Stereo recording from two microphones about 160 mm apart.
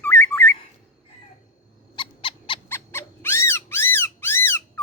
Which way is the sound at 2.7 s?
15° left (ahead or behind).